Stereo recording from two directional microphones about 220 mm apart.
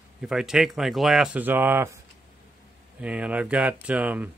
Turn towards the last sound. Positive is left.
turn(degrees=-5)  # may be behind; listen again after turning